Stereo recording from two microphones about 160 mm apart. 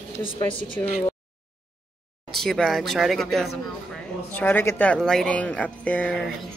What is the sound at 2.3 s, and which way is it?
Speech, centre (ahead or behind).